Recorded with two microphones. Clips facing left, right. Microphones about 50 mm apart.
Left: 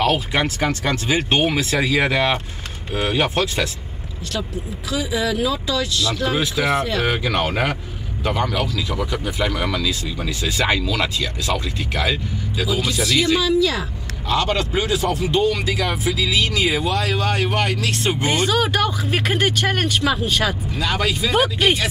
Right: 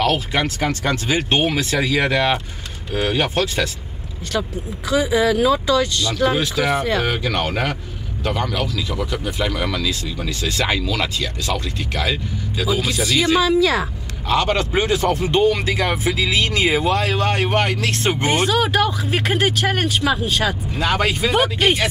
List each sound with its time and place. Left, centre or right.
0.0 s speech: centre
4.3 s speech: right
6.0 s speech: centre
6.3 s speech: centre; by 18.1 s right
18.2 s speech: centre
20.7 s speech: right
21.3 s speech: centre